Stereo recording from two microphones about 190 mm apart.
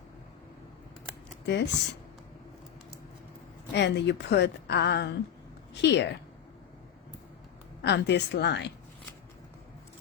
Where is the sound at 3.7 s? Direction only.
65° left (ahead or behind).